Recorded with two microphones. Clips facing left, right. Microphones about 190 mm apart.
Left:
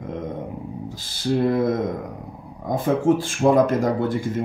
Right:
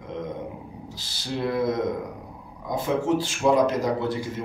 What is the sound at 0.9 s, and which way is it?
Speech, 50° left (ahead or behind).